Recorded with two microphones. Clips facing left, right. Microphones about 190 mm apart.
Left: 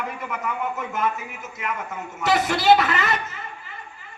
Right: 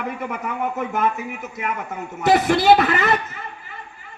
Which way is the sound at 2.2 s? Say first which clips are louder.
Right 5 dB; 60° right (ahead or behind).